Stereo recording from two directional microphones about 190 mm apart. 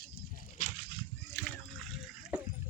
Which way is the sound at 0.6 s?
30° left (ahead or behind).